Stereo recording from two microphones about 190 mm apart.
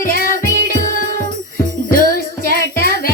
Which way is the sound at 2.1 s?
50° left (ahead or behind).